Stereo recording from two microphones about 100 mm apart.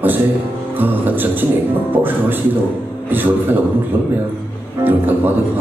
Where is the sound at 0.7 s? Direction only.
20° right (ahead or behind).